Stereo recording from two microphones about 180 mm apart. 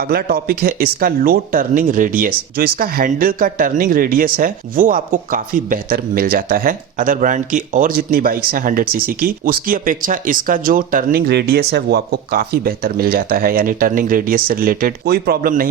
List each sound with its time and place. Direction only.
0.0 s speech: 60° right (ahead or behind)